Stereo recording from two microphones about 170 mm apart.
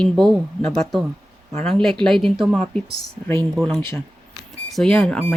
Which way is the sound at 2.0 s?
Centre (ahead or behind).